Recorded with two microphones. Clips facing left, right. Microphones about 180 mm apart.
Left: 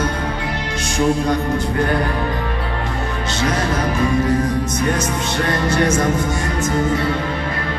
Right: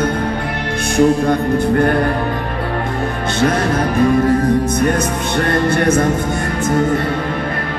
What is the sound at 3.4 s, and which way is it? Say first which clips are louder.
Music: right 5 dB; 55° right (ahead or behind).